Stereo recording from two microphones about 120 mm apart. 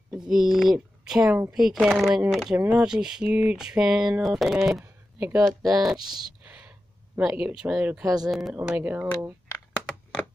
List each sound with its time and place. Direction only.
0.1 s speech: centre (ahead or behind)
2.5 s speech: 10° right (ahead or behind)
4.6 s a sound: centre (ahead or behind)
5.4 s speech: centre (ahead or behind)
6.4 s a sound: 10° right (ahead or behind)
7.2 s speech: 10° right (ahead or behind)
8.0 s speech: 30° right (ahead or behind)
8.3 s speech: centre (ahead or behind)
8.5 s speech: 15° right (ahead or behind)